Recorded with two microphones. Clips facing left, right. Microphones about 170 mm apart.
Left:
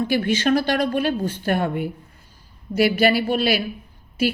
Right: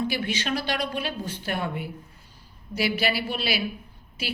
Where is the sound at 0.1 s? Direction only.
50° left (ahead or behind).